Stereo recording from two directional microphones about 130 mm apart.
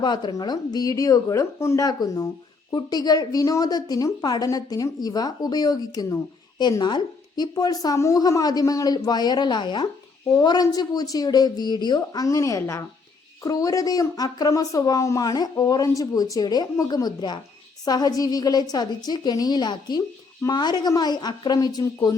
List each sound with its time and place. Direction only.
0.0 s a woman's voice: 35° left (ahead or behind)